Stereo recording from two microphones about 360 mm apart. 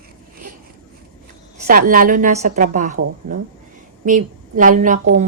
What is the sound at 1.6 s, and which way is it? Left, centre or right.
A woman's voice, right.